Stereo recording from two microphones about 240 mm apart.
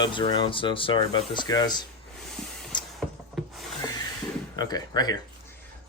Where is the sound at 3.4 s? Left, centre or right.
Centre.